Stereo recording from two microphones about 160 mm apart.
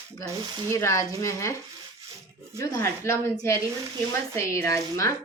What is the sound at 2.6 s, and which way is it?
A woman's voice, 15° left (ahead or behind).